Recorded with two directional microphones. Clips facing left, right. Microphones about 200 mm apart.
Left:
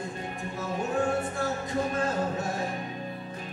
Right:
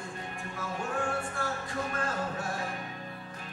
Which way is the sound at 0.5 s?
20° left (ahead or behind).